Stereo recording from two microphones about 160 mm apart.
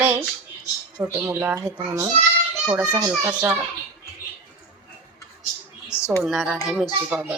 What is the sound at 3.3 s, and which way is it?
Speech, 10° right (ahead or behind).